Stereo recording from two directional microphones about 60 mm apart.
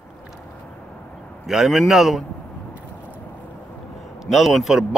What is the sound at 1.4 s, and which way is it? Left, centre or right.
Speech, centre.